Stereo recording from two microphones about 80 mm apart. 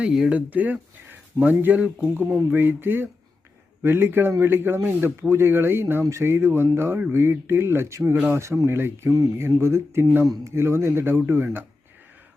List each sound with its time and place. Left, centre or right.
0.0 s speech: centre; by 11.6 s right